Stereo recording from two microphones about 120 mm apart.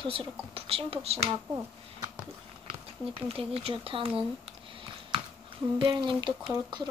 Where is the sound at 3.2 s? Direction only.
55° right (ahead or behind).